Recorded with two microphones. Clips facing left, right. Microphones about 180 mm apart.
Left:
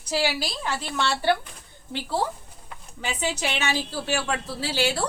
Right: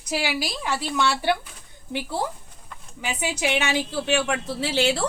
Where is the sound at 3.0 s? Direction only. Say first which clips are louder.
Right 2 dB; 15° right (ahead or behind).